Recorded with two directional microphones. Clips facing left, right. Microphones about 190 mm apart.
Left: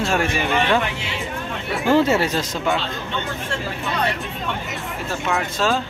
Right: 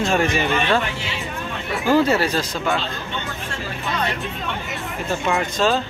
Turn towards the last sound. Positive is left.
turn(degrees=0)  # may be behind; listen again after turning